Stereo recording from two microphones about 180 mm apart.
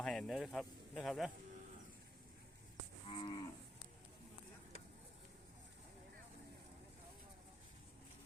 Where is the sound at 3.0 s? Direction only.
30° left (ahead or behind).